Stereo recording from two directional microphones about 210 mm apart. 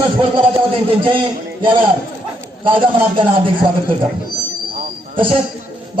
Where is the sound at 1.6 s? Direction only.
25° right (ahead or behind).